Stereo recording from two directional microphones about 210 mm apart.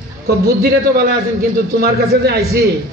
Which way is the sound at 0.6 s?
45° right (ahead or behind).